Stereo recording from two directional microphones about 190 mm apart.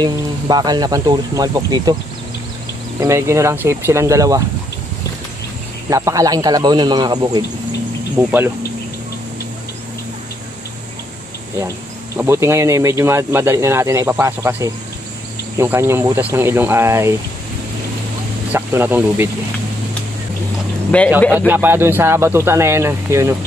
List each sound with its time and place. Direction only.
0.0 s speech: 20° right (ahead or behind)
3.0 s speech: 15° right (ahead or behind)
5.9 s speech: 15° right (ahead or behind)
8.2 s speech: 10° right (ahead or behind)
12.2 s speech: 15° right (ahead or behind)
18.5 s speech: 10° right (ahead or behind)
21.2 s speech: 10° left (ahead or behind)
21.5 s speech: 10° right (ahead or behind)